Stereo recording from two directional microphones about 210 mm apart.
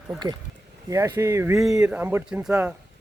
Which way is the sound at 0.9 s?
15° right (ahead or behind).